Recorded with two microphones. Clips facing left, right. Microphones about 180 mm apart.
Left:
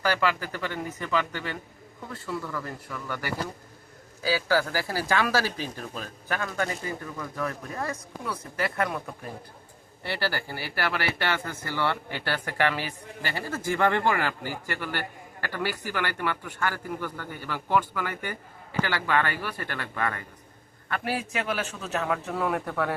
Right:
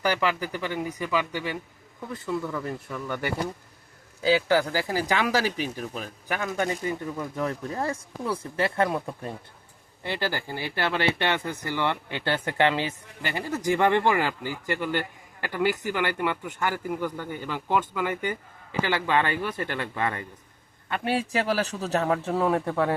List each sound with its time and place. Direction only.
0.0 s a man's voice: 15° right (ahead or behind)